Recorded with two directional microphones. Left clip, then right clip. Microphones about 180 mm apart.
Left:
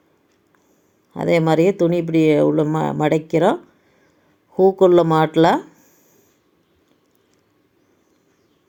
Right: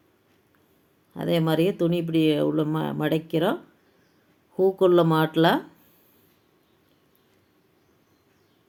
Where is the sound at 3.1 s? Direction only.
10° left (ahead or behind).